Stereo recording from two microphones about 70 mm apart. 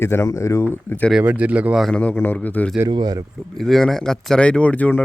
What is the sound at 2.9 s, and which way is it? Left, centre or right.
Speech, right.